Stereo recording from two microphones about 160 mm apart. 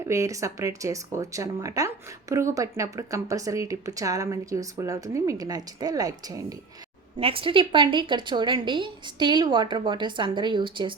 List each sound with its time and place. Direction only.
0.0 s speech: 20° right (ahead or behind)
7.2 s speech: 35° right (ahead or behind)